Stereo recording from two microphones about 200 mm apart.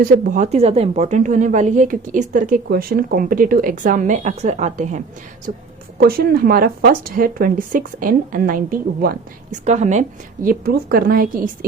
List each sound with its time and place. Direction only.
0.0 s a woman's voice: 40° right (ahead or behind)
6.0 s speech: 50° right (ahead or behind)
9.6 s speech: 35° right (ahead or behind)